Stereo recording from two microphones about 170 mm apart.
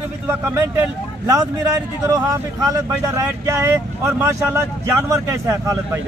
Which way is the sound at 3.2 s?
15° right (ahead or behind).